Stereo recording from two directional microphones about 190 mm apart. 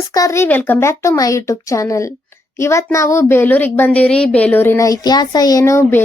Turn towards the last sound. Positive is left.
turn(degrees=15)  # may be behind; listen again after turning